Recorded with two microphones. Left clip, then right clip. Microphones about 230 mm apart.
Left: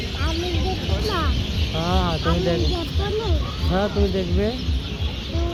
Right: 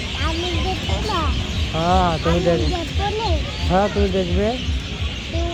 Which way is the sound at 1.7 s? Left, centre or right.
Right.